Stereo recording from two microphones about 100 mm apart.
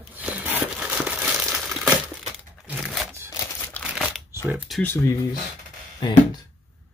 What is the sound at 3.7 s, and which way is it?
Crumpling, 15° left (ahead or behind).